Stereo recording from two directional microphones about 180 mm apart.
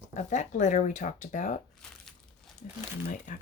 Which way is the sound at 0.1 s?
40° left (ahead or behind).